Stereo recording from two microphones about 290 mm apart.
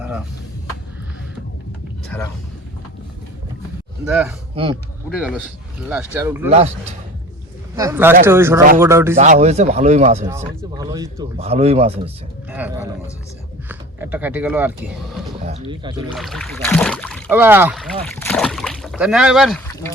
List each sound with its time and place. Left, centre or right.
0.0 s a sound: centre
4.1 s speech: centre
4.5 s speech: centre
5.0 s speech: centre
7.8 s speech: centre
9.1 s speech: right
10.2 s speech: centre
12.5 s speech: centre
15.4 s speech: centre
16.0 s speech: centre